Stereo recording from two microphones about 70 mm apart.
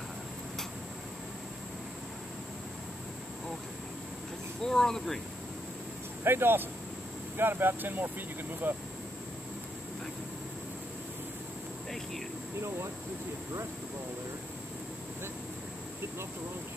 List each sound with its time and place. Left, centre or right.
4.6 s speech: centre
6.2 s speech: right
12.5 s speech: right